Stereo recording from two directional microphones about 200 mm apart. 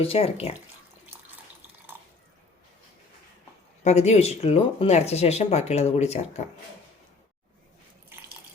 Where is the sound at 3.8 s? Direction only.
35° left (ahead or behind).